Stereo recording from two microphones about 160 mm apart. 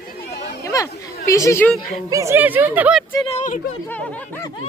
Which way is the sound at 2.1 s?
20° right (ahead or behind).